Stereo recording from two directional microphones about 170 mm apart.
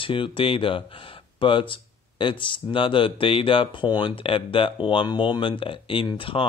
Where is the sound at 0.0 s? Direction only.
30° left (ahead or behind).